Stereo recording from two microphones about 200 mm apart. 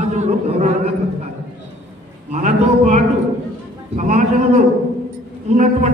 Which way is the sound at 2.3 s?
35° right (ahead or behind).